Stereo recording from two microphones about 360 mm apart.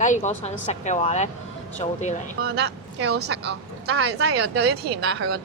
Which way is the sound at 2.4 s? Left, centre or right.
Right.